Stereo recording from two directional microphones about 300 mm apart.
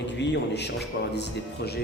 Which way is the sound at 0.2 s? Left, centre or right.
Left.